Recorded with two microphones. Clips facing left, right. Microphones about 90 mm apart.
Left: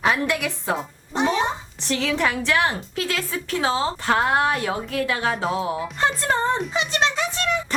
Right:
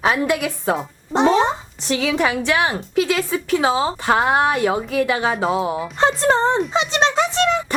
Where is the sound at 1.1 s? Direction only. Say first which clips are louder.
Right 6 dB; 30° right (ahead or behind).